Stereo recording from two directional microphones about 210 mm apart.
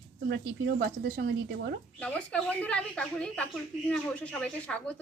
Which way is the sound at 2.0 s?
5° left (ahead or behind).